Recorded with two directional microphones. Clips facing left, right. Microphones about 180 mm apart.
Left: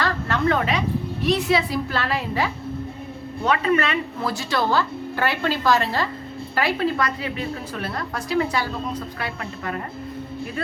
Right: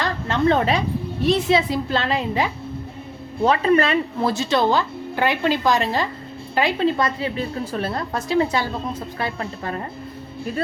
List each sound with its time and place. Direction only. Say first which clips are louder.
0.0 s a sound: right 2 dB; 25° right (ahead or behind)
1.2 s a woman's voice: right 3 dB; 25° right (ahead or behind)
3.4 s a woman's voice: right 4 dB; 35° right (ahead or behind)